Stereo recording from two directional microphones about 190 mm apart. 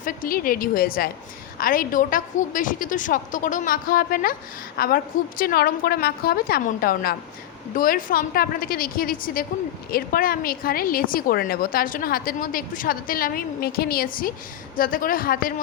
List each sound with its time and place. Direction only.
0.0 s a woman's voice: 45° left (ahead or behind)